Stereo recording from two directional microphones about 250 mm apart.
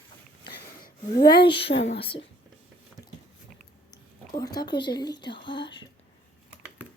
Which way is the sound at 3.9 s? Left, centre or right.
Centre.